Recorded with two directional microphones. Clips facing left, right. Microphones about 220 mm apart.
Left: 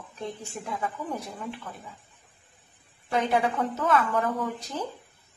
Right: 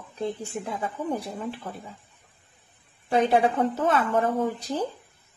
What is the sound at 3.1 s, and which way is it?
Speech, 30° right (ahead or behind).